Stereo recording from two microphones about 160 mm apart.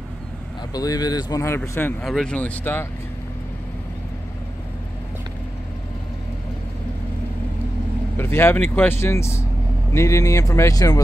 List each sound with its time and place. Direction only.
0.7 s speech: 25° left (ahead or behind)
8.2 s speech: 15° left (ahead or behind)